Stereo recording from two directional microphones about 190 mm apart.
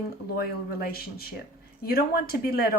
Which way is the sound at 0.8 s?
55° left (ahead or behind).